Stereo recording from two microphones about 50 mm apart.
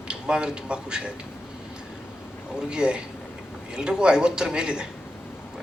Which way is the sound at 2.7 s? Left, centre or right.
Centre.